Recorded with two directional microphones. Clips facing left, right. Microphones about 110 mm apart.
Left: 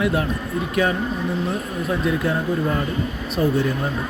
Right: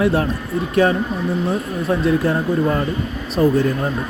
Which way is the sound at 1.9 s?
35° right (ahead or behind).